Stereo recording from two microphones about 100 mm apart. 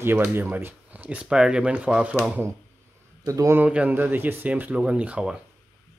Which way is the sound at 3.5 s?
15° right (ahead or behind).